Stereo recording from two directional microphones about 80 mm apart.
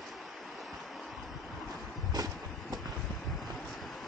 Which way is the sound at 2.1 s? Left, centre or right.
Right.